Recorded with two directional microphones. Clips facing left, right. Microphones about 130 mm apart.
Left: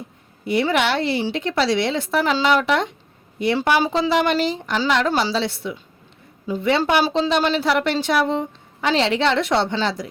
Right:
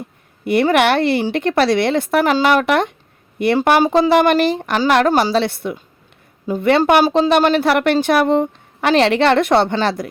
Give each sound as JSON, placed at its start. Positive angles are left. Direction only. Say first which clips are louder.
{"t": 0.4, "sound": "speech", "louder": "right 6 dB", "side_deg": -60}